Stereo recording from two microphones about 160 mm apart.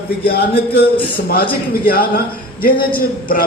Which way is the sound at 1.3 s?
70° left (ahead or behind).